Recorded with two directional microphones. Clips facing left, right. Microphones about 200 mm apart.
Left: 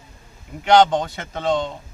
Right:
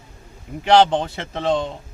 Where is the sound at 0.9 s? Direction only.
30° right (ahead or behind).